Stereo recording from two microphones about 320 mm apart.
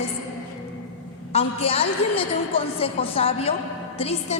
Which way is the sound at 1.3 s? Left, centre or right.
Centre.